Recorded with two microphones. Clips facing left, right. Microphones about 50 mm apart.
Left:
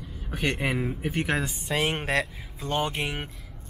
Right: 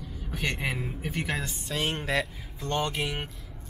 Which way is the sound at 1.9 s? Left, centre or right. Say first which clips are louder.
Right 1 dB; left.